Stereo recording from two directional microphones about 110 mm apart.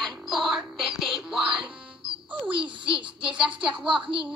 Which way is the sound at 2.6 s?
50° right (ahead or behind).